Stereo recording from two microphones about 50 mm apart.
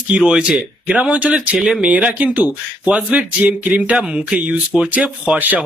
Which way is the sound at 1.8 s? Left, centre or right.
Right.